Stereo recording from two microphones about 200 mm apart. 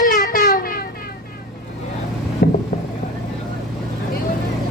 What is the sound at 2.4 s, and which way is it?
Vehicle, 50° left (ahead or behind).